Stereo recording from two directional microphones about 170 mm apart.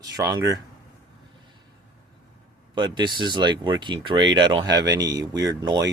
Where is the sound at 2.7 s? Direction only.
25° right (ahead or behind).